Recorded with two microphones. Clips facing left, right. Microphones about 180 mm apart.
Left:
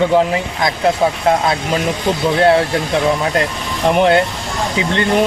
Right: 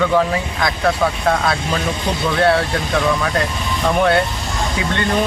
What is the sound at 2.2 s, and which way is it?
Speech, 25° left (ahead or behind).